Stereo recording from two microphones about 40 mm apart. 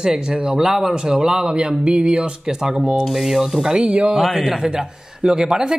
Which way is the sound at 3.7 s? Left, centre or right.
Right.